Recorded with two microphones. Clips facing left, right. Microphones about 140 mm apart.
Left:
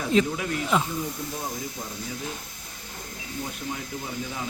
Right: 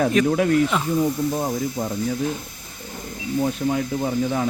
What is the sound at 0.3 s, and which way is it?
Speech, 50° right (ahead or behind).